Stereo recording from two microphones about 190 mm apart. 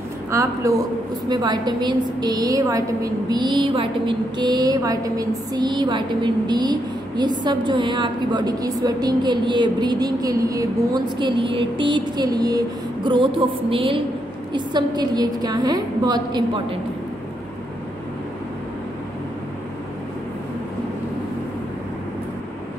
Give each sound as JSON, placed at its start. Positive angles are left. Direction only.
{"t": 0.3, "sound": "a woman's voice", "side_deg": -15}